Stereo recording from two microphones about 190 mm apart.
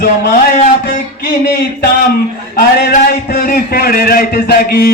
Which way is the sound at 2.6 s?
55° left (ahead or behind).